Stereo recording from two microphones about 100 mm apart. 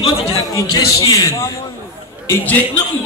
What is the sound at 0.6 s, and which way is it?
Speech, 35° left (ahead or behind).